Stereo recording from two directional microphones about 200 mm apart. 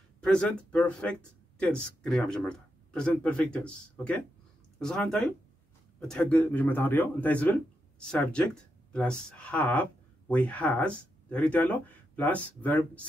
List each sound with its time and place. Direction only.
0.2 s speech: 5° left (ahead or behind)